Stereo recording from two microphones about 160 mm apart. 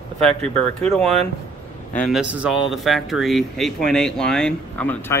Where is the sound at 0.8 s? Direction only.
5° left (ahead or behind).